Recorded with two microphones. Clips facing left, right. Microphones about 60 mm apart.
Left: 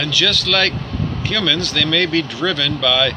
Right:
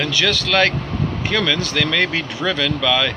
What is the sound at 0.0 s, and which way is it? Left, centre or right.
Speech, right.